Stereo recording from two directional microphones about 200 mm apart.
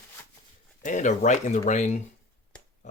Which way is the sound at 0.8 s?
40° left (ahead or behind).